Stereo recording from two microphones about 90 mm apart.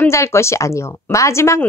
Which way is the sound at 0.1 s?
30° left (ahead or behind).